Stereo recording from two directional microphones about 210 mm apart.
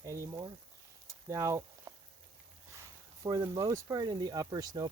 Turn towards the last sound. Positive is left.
turn(degrees=-20)  # may be behind; listen again after turning